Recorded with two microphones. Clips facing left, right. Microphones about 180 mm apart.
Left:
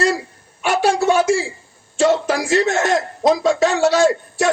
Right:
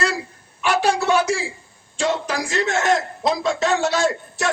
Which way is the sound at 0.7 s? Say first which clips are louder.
Left 3 dB; 45° left (ahead or behind).